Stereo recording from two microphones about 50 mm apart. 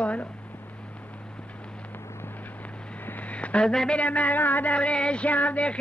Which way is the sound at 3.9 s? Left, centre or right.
Left.